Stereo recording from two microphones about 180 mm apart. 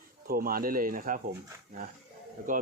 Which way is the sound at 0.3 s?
55° right (ahead or behind).